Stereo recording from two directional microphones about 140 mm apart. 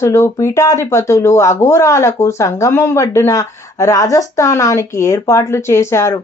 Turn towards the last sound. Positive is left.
turn(degrees=20)  # may be behind; listen again after turning